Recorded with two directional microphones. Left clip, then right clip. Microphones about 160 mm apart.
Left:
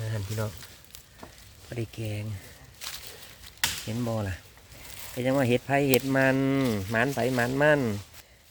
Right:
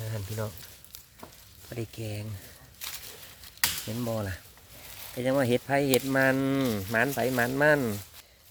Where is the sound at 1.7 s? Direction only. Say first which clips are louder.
Left 1 dB; centre (ahead or behind).